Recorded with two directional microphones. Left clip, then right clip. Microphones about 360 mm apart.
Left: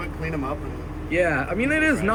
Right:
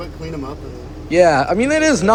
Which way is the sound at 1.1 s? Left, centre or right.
Centre.